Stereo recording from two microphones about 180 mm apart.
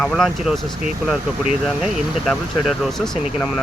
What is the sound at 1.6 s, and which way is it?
Speech, centre (ahead or behind).